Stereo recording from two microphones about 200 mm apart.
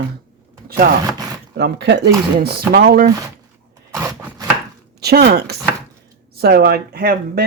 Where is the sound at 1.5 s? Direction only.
55° right (ahead or behind).